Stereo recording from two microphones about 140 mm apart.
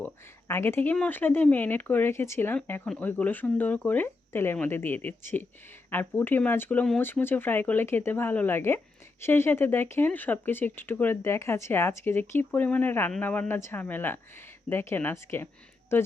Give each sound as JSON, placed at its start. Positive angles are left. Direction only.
{"t": 0.0, "sound": "speech", "side_deg": 15}